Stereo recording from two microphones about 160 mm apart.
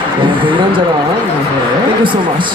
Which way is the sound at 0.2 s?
30° right (ahead or behind).